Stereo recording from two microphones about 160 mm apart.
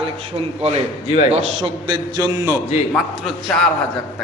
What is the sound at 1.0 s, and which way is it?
Speech, 40° left (ahead or behind).